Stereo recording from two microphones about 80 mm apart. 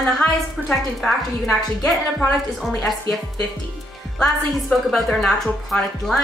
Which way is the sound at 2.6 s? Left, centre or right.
Centre.